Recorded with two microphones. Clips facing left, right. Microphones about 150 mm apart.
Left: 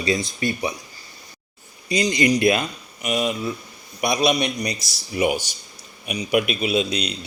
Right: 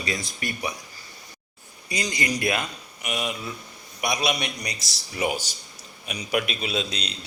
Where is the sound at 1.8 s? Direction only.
20° left (ahead or behind).